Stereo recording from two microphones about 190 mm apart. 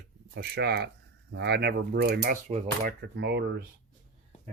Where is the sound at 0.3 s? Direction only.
60° right (ahead or behind).